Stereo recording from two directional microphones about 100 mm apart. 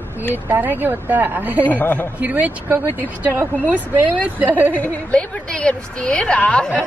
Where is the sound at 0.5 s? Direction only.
20° right (ahead or behind).